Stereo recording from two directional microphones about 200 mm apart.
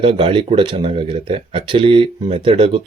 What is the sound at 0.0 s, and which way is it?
Speech, 30° right (ahead or behind).